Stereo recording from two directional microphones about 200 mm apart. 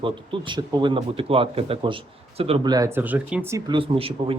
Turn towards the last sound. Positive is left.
turn(degrees=-25)  # may be behind; listen again after turning